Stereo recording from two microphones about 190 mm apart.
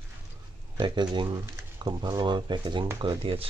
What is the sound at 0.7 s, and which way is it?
Speech, 25° right (ahead or behind).